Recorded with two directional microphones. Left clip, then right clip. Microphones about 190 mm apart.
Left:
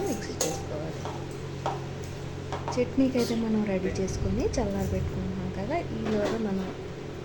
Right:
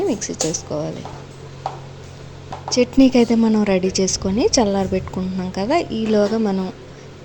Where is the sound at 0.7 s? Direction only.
35° right (ahead or behind).